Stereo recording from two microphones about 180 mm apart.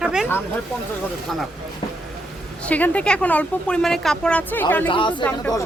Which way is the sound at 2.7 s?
5° left (ahead or behind).